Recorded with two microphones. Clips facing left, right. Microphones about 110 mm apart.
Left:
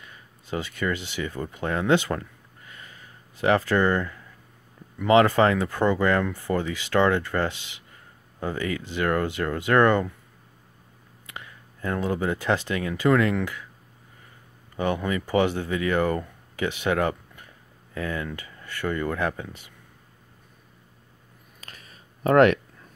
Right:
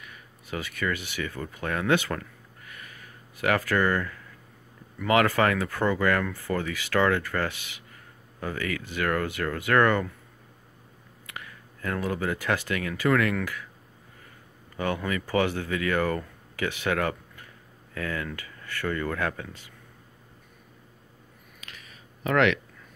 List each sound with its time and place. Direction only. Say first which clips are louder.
0.0 s speech: right 1 dB; 25° left (ahead or behind)
11.2 s speech: even; 25° left (ahead or behind)
14.8 s speech: left 3 dB; 20° left (ahead or behind)
21.5 s a sound: left 1 dB; 40° left (ahead or behind)